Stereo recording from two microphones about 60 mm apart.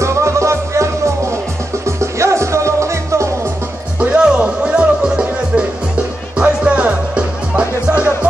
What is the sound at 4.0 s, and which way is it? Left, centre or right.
Music, right.